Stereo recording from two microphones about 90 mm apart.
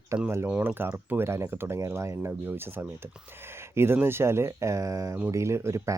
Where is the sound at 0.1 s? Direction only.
30° right (ahead or behind).